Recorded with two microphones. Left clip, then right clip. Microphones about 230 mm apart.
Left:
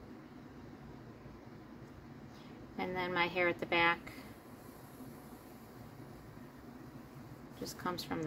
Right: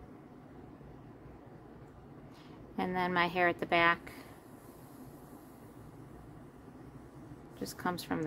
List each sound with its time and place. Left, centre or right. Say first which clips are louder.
2.8 s a woman's voice: right 4 dB; right
7.6 s a woman's voice: right 3 dB; right